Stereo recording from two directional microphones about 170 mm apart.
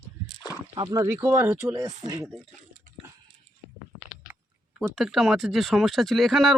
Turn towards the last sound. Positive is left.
turn(degrees=0)  # may be behind; listen again after turning